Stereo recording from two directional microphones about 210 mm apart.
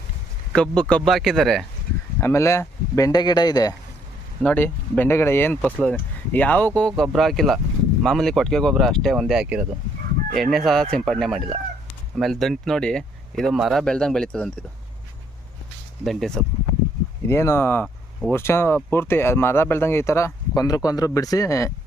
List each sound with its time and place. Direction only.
0.5 s speech: 5° left (ahead or behind)
2.2 s speech: 15° left (ahead or behind)
16.0 s speech: centre (ahead or behind)